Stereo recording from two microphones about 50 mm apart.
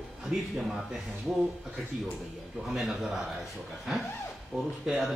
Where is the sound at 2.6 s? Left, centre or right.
Centre.